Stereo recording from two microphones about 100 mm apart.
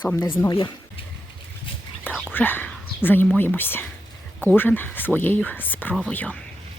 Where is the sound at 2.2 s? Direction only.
20° left (ahead or behind).